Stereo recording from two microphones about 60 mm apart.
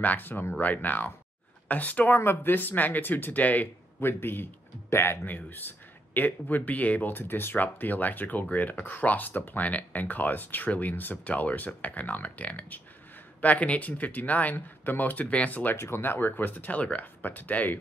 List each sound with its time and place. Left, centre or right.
0.0 s speech: left
15.7 s speech: left